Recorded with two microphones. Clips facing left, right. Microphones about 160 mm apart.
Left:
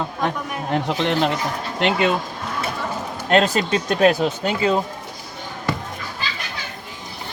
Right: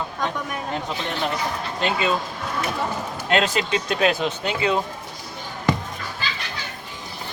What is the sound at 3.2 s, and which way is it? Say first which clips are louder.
Speech: left 4 dB; 40° left (ahead or behind).